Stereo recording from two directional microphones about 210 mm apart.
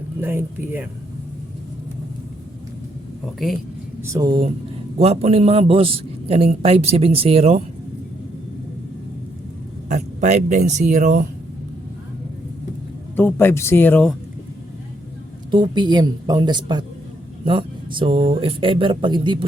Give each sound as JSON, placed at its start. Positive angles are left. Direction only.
{"t": 0.2, "sound": "speech", "side_deg": -10}
{"t": 3.3, "sound": "speech", "side_deg": 0}
{"t": 4.0, "sound": "a man's voice", "side_deg": -15}
{"t": 9.9, "sound": "speech", "side_deg": -35}
{"t": 13.1, "sound": "speech", "side_deg": 10}
{"t": 15.4, "sound": "a man's voice", "side_deg": -20}